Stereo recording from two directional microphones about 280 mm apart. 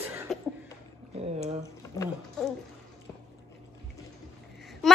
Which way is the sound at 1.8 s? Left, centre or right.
Centre.